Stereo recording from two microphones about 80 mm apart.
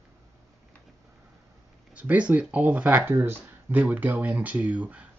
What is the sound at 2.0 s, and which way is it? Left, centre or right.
Speech, centre.